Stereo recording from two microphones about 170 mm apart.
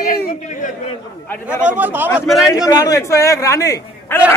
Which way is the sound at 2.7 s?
20° left (ahead or behind).